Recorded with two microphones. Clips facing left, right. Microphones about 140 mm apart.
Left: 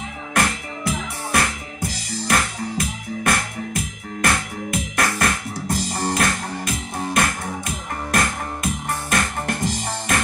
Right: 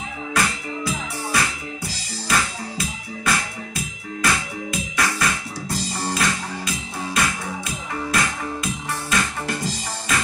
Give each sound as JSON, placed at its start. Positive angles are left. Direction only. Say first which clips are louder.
{"t": 0.3, "sound": "music", "louder": "left 2 dB", "side_deg": 55}